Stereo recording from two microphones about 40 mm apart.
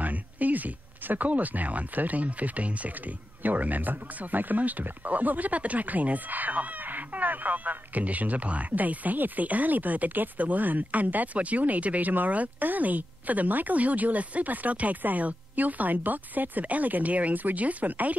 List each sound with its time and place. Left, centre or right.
0.0 s speech: right